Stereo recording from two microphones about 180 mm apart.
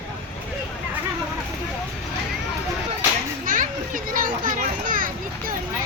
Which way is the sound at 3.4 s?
50° right (ahead or behind).